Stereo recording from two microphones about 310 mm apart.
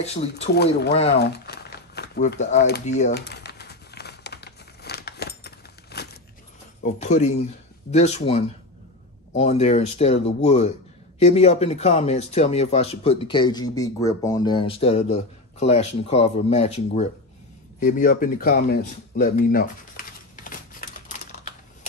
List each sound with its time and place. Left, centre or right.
0.0 s speech: centre
0.6 s speech: left
1.1 s crumpling: left
6.8 s speech: left